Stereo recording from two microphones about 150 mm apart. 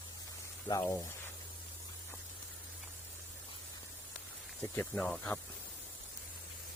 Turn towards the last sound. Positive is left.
turn(degrees=10)  # may be behind; listen again after turning